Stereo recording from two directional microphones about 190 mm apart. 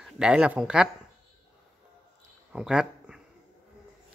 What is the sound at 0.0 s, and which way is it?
Speech, 5° right (ahead or behind).